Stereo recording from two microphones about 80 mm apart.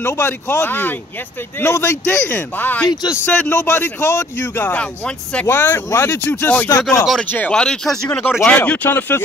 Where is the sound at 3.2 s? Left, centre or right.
Centre.